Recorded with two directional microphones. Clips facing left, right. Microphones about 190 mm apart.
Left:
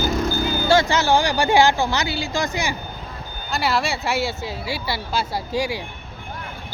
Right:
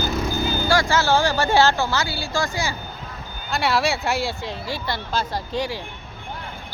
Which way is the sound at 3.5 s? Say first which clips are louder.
Right 1 dB; centre (ahead or behind).